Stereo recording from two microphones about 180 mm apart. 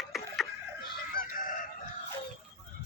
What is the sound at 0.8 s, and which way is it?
Chicken, 50° left (ahead or behind).